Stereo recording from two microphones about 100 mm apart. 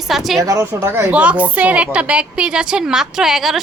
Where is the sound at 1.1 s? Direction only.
15° right (ahead or behind).